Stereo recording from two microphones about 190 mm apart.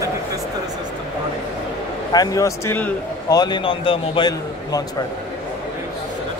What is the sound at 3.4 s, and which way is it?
A man's voice, 25° left (ahead or behind).